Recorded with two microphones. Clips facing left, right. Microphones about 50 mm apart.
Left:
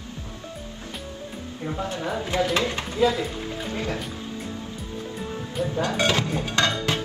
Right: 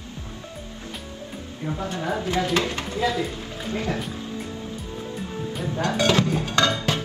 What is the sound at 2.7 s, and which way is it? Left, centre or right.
Speech, left.